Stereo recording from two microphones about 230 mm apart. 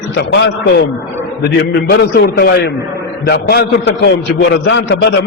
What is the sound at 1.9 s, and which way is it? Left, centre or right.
A man's voice, left.